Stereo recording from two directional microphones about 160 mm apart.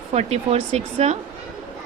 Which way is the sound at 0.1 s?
40° right (ahead or behind).